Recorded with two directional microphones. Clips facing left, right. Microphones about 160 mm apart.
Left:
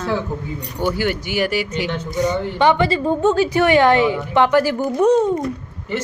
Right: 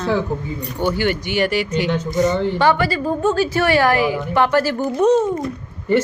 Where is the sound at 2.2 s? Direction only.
15° left (ahead or behind).